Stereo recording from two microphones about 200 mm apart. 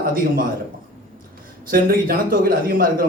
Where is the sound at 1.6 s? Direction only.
45° right (ahead or behind).